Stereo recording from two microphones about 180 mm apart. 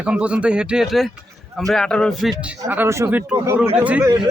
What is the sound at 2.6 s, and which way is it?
A man's voice, 15° right (ahead or behind).